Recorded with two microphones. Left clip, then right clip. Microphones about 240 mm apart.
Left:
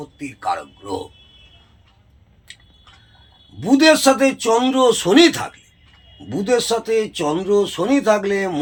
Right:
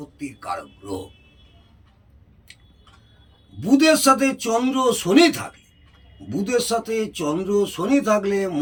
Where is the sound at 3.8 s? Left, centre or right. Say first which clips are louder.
Left 4 dB; centre.